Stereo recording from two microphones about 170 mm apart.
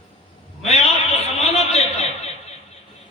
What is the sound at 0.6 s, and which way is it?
A woman's voice, 40° left (ahead or behind).